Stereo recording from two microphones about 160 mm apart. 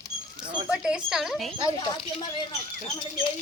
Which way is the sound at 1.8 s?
30° left (ahead or behind).